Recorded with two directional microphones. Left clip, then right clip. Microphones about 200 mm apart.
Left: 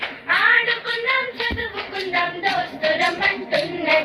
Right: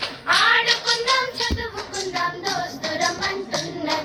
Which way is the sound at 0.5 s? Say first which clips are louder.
Even; 65° right (ahead or behind).